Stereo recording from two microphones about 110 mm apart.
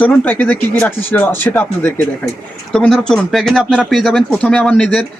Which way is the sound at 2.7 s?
5° left (ahead or behind).